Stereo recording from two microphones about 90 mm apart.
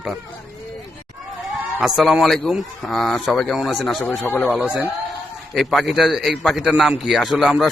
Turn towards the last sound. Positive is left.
turn(degrees=0)  # may be behind; listen again after turning